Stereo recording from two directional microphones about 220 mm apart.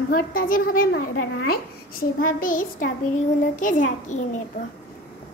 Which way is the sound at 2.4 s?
40° left (ahead or behind).